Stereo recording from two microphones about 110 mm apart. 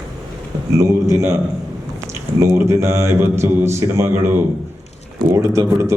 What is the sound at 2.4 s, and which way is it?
A man's voice, 25° right (ahead or behind).